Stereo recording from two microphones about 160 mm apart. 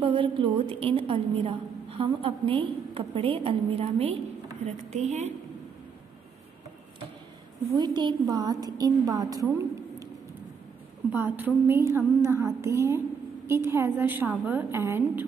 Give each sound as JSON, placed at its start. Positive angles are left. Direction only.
{"t": 0.0, "sound": "a woman's voice", "side_deg": -35}
{"t": 7.7, "sound": "a woman's voice", "side_deg": -25}
{"t": 11.1, "sound": "a woman's voice", "side_deg": -10}